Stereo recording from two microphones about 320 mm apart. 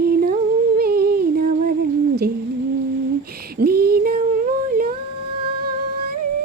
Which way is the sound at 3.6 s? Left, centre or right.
Right.